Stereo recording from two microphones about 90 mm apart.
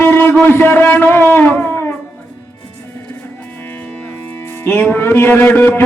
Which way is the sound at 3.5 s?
20° left (ahead or behind).